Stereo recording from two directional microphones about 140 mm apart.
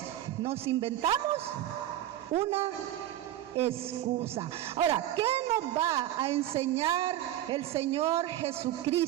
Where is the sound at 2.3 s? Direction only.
45° right (ahead or behind).